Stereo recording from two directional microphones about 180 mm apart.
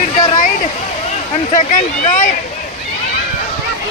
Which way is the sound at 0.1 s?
40° left (ahead or behind).